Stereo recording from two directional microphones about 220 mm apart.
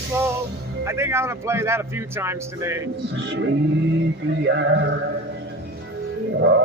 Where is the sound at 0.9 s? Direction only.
10° right (ahead or behind).